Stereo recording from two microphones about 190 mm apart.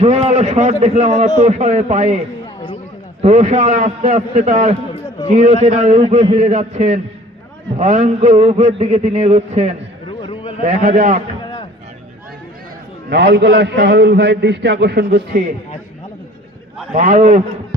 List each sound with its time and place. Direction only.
0.0 s a man's voice: 35° right (ahead or behind)
10.1 s a sound: 25° left (ahead or behind)
10.6 s a man's voice: 40° right (ahead or behind)
13.1 s a man's voice: 60° right (ahead or behind)
16.9 s a man's voice: 45° right (ahead or behind)